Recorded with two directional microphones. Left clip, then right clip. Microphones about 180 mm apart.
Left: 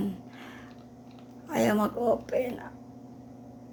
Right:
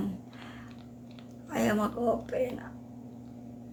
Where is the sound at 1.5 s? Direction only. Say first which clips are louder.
Left 3 dB; 25° left (ahead or behind).